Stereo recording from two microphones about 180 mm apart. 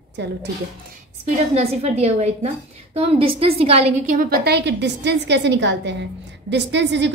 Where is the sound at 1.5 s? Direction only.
35° right (ahead or behind).